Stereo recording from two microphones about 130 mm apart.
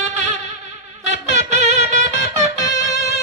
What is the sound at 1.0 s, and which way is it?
Music, 60° right (ahead or behind).